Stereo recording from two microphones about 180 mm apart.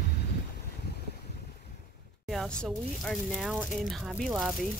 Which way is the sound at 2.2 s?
5° left (ahead or behind).